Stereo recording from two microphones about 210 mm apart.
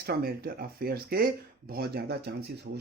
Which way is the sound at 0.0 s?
45° right (ahead or behind).